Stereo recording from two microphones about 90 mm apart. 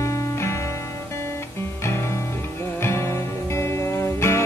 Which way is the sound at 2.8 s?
30° left (ahead or behind).